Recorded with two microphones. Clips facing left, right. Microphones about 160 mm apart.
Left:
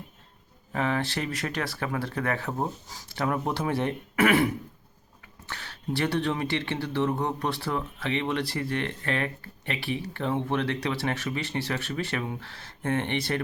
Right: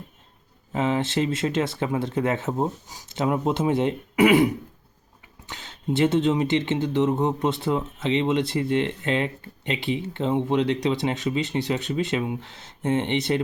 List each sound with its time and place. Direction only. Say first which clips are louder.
0.7 s speech: right 4 dB; 20° right (ahead or behind)